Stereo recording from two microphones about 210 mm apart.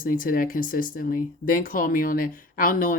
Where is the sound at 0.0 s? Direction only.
40° left (ahead or behind).